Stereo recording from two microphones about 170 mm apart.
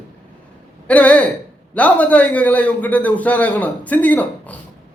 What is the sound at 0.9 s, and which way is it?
A man's voice, 10° left (ahead or behind).